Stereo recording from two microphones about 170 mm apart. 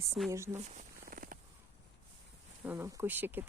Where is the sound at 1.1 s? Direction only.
55° right (ahead or behind).